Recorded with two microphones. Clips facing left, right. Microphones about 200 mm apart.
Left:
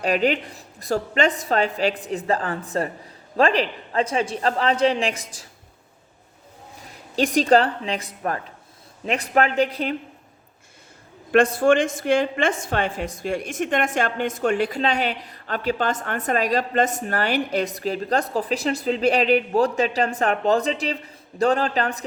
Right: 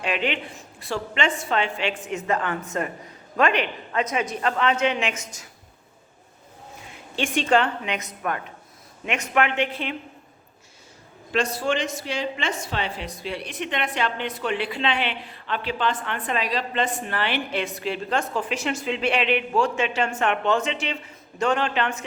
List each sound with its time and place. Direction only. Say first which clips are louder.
0.0 s a woman's voice: left 5 dB; 40° left (ahead or behind)
6.8 s a woman's voice: left 6 dB; 40° left (ahead or behind)
11.3 s a woman's voice: left 8 dB; 55° left (ahead or behind); by 22.0 s 35° left (ahead or behind)